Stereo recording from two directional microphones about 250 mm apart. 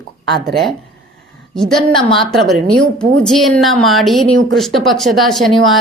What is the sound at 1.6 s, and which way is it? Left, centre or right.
Speech, centre.